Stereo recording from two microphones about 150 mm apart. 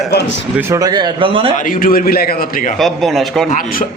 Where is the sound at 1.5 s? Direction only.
65° left (ahead or behind).